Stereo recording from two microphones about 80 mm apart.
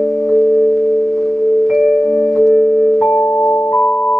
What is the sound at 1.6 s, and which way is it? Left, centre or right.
Music, centre.